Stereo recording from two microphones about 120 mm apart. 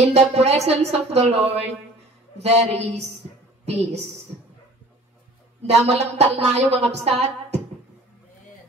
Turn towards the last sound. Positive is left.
turn(degrees=-60)  # may be behind; listen again after turning